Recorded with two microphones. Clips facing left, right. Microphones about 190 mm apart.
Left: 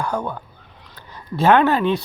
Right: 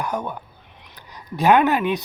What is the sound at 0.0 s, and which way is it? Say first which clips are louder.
Speech: left 2 dB; 20° right (ahead or behind).